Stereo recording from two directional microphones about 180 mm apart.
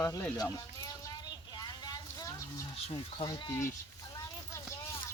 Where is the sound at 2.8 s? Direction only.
25° left (ahead or behind).